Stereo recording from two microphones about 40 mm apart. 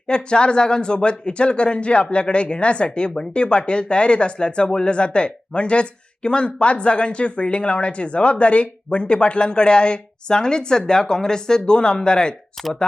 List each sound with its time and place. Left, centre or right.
0.1 s speech: left